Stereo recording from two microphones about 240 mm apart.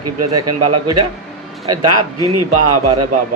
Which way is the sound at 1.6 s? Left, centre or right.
Right.